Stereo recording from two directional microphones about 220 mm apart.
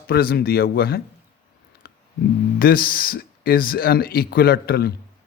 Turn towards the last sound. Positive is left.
turn(degrees=45)  # may be behind; listen again after turning